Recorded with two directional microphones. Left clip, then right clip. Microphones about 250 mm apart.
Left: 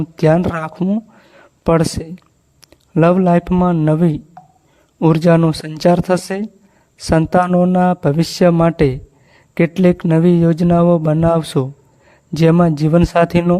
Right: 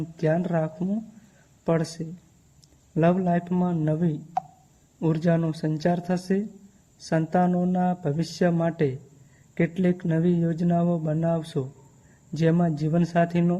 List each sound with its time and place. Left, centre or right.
0.0 s a man's voice: left